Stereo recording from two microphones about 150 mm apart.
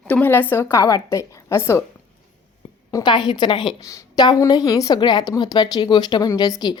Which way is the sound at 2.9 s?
30° left (ahead or behind).